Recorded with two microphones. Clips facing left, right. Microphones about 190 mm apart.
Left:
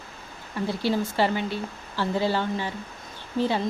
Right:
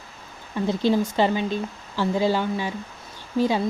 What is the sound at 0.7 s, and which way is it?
A woman's voice, 20° right (ahead or behind).